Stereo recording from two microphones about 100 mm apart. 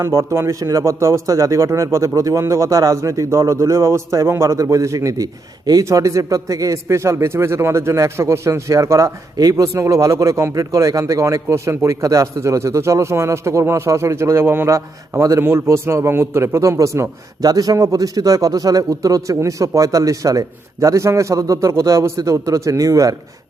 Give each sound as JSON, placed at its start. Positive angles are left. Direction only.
{"t": 0.0, "sound": "speech", "side_deg": -30}